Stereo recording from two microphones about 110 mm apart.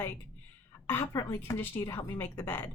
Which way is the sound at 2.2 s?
20° left (ahead or behind).